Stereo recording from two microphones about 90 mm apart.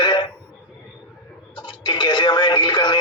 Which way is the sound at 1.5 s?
60° left (ahead or behind).